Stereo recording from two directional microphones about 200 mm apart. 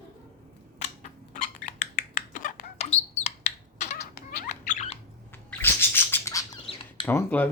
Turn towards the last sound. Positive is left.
turn(degrees=10)  # may be behind; listen again after turning